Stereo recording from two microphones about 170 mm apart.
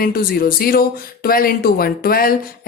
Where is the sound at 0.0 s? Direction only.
60° left (ahead or behind).